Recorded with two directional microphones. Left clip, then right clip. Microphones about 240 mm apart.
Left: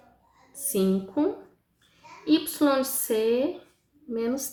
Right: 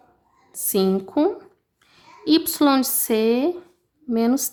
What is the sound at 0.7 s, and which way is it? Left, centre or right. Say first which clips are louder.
Speech: right 5 dB; right.